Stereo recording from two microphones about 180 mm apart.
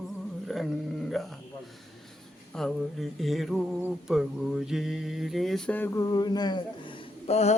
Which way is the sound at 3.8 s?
Centre (ahead or behind).